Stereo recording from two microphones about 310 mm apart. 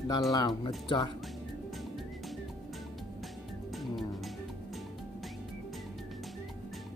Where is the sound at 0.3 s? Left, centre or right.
Centre.